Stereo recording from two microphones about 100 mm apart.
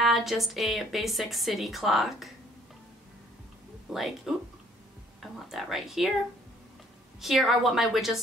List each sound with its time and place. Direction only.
0.0 s a woman's voice: centre (ahead or behind)
3.9 s a woman's voice: 5° right (ahead or behind)
7.2 s a woman's voice: centre (ahead or behind)